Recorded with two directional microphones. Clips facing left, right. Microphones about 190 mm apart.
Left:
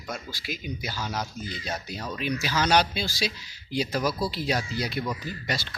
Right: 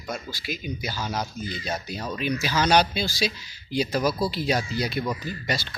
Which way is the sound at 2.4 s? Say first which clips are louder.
Right 2 dB; 25° right (ahead or behind).